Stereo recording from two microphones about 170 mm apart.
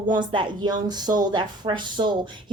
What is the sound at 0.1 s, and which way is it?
Speech, 30° right (ahead or behind).